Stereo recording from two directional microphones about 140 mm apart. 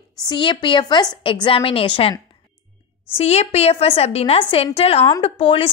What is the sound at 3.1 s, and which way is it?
A woman's voice, 50° left (ahead or behind).